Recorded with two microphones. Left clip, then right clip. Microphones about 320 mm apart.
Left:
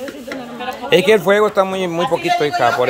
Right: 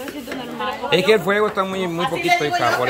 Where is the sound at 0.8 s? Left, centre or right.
Centre.